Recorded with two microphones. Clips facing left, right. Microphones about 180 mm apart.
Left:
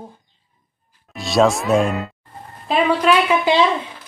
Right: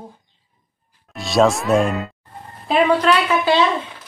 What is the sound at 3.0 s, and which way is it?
Speech, 15° left (ahead or behind).